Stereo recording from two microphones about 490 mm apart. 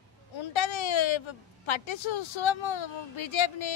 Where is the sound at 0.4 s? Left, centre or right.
Left.